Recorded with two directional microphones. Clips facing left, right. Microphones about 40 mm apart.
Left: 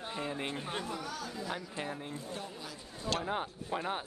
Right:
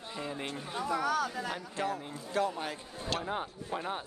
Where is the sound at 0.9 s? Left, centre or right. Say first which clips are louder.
Right 9 dB; right.